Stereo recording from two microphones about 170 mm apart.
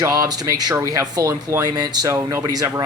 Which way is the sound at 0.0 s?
20° right (ahead or behind).